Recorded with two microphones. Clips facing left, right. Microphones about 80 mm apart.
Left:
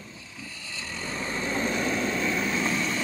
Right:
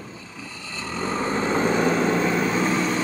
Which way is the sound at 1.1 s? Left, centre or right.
Right.